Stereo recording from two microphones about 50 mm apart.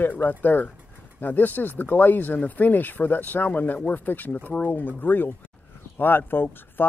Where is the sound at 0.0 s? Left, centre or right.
Left.